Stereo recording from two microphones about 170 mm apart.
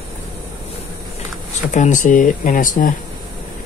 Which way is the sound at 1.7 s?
45° left (ahead or behind).